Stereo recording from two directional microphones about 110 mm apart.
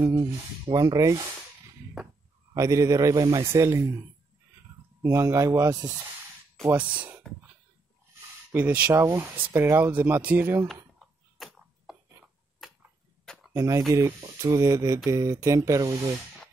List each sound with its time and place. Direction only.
0.0 s speech: 25° right (ahead or behind)
2.0 s speech: 5° right (ahead or behind)
2.5 s speech: 30° right (ahead or behind)
3.4 s speech: 25° right (ahead or behind)
5.0 s speech: 25° right (ahead or behind)
6.8 s speech: 15° right (ahead or behind)
8.5 s speech: 15° right (ahead or behind)
11.0 s a sound: centre (ahead or behind)
13.2 s a sound: 5° left (ahead or behind)
13.5 s speech: 30° right (ahead or behind)